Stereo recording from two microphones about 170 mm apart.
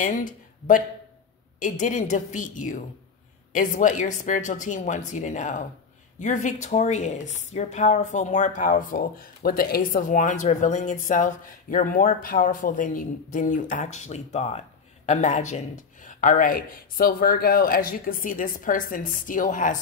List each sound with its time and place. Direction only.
0.0 s a woman's voice: 50° left (ahead or behind)